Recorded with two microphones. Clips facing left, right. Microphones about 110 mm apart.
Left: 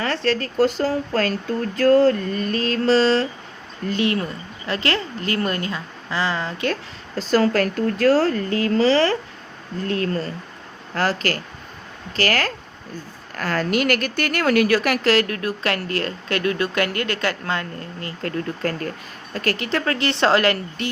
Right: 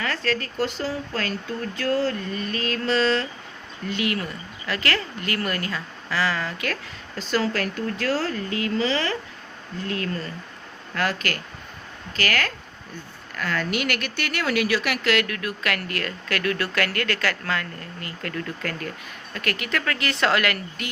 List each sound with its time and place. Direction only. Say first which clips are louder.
0.0 s speech: left 5 dB; 30° left (ahead or behind)
7.2 s speech: left 6 dB; 40° left (ahead or behind)